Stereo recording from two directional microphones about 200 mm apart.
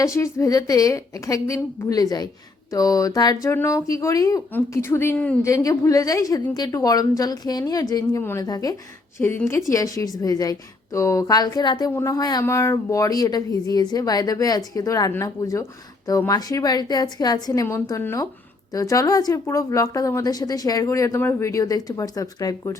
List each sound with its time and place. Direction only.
0.0 s a woman's voice: 15° left (ahead or behind)